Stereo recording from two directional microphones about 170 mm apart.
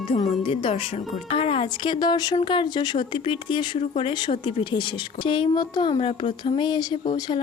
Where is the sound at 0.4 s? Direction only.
35° left (ahead or behind).